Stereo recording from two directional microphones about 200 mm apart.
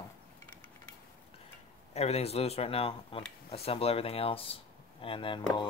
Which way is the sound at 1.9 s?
30° left (ahead or behind).